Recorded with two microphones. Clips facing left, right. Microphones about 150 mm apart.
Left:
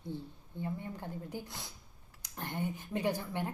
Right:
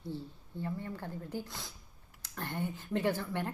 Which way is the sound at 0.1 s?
15° left (ahead or behind).